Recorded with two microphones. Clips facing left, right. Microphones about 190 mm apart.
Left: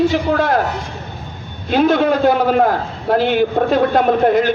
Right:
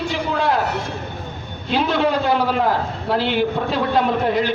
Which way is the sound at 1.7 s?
50° left (ahead or behind).